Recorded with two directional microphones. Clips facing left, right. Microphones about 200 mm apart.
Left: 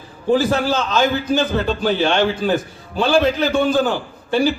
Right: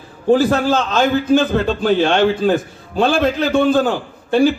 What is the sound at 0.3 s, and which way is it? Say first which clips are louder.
A man's voice: right 1 dB; 55° right (ahead or behind).